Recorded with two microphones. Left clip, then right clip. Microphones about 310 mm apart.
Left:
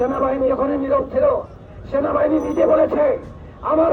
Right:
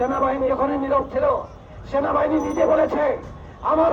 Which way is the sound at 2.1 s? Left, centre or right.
Right.